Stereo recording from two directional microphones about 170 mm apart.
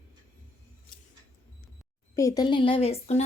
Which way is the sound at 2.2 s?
20° left (ahead or behind).